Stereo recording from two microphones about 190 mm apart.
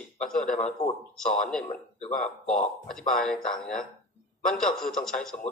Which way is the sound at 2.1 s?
5° left (ahead or behind).